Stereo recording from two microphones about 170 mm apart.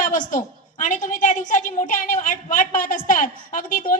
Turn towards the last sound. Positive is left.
turn(degrees=55)  # may be behind; listen again after turning